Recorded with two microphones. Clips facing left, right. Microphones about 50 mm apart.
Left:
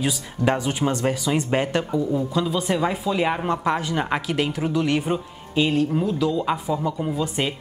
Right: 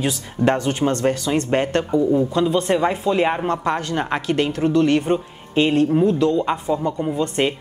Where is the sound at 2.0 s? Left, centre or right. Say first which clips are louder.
Right 8 dB; centre.